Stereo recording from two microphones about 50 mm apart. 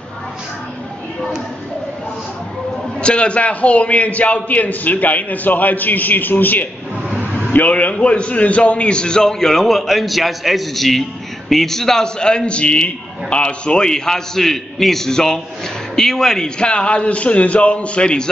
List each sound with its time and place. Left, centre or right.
3.0 s a man's voice: left